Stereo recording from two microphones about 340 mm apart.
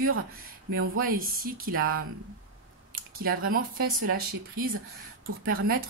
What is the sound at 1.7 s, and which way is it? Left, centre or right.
Speech, right.